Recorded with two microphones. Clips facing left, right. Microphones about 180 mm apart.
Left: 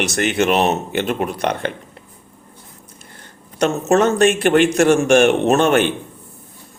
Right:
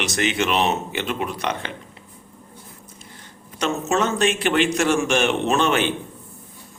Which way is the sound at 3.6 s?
55° left (ahead or behind).